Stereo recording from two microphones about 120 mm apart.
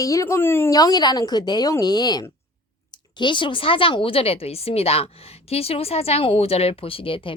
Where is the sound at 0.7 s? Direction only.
30° left (ahead or behind).